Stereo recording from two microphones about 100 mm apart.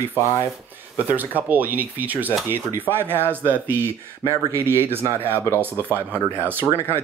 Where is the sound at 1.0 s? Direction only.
15° right (ahead or behind).